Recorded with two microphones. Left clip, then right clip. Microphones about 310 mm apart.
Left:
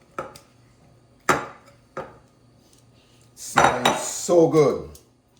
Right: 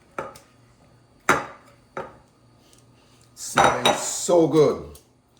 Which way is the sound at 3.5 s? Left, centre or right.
Centre.